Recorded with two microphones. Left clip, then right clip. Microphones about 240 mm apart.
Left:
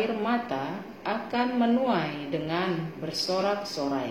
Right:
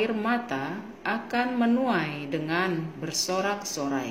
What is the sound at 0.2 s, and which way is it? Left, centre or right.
A woman's voice, right.